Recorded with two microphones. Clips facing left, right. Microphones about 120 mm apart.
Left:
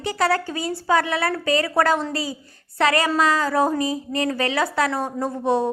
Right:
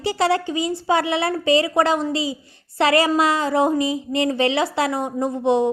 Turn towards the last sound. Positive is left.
turn(degrees=-20)  # may be behind; listen again after turning